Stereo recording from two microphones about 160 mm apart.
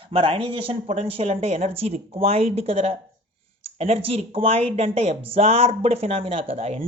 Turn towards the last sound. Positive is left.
turn(degrees=-40)  # may be behind; listen again after turning